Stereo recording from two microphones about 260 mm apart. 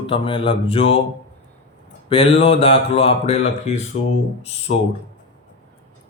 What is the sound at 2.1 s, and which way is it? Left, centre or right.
Mantra, left.